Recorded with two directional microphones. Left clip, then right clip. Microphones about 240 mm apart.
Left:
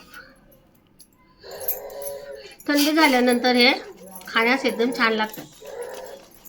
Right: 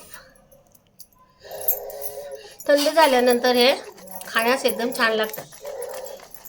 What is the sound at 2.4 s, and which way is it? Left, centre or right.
A woman's voice, right.